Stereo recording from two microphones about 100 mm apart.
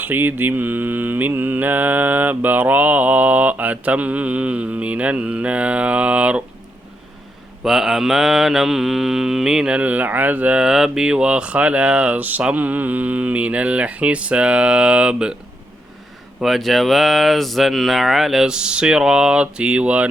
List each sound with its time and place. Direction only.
0.0 s mantra: 20° right (ahead or behind)
7.6 s mantra: 5° right (ahead or behind)
16.4 s speech: centre (ahead or behind)